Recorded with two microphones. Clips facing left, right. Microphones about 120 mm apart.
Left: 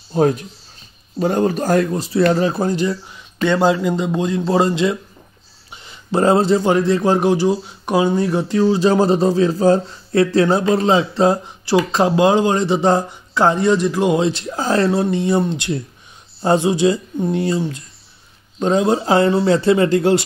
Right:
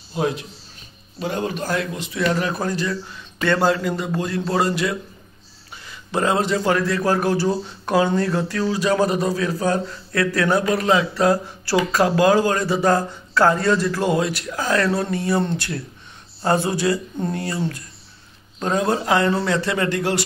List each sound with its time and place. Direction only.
0.1 s a man's voice: 45° left (ahead or behind); by 20.2 s 25° left (ahead or behind)